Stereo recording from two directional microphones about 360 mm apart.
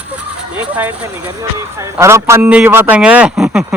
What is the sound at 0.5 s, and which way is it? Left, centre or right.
Speech, centre.